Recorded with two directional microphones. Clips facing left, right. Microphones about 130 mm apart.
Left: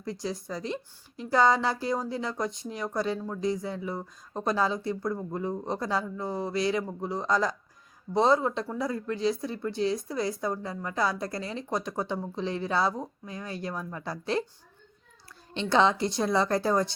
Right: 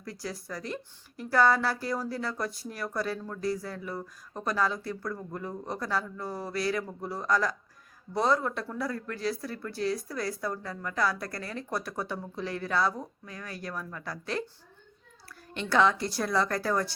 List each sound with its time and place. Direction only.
0.0 s speech: 20° left (ahead or behind)
15.5 s speech: 25° left (ahead or behind)